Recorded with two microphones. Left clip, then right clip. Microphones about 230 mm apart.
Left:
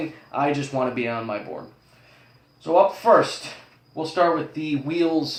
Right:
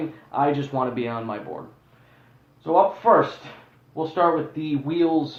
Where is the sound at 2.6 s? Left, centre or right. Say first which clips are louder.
Left 1 dB; left.